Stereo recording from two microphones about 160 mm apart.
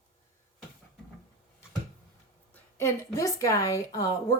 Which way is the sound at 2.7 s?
20° left (ahead or behind).